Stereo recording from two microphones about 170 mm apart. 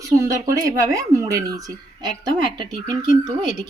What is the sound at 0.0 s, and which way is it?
A woman's voice, 20° right (ahead or behind).